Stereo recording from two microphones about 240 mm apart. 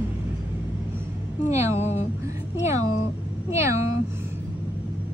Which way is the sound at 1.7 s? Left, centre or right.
Left.